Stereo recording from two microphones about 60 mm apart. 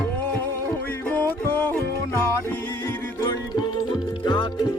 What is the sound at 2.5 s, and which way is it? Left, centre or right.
Music, left.